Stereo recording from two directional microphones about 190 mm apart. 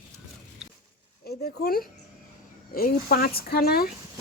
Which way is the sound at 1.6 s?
50° left (ahead or behind).